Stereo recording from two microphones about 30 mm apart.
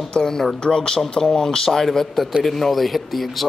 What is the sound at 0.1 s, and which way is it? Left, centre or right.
Speech, left.